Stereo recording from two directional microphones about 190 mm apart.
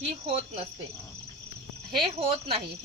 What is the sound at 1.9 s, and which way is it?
Cricket, 30° right (ahead or behind).